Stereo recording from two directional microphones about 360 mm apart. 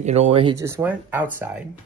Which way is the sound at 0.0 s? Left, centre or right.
Centre.